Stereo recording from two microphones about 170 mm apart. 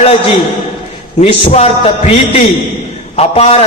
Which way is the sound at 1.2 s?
40° left (ahead or behind).